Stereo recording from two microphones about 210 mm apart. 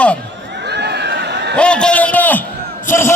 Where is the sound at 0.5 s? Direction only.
55° right (ahead or behind).